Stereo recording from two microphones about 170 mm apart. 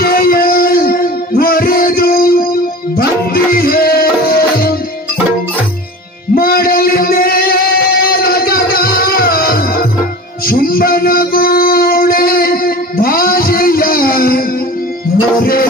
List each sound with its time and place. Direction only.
0.0 s music: 60° left (ahead or behind)
6.3 s music: 60° left (ahead or behind)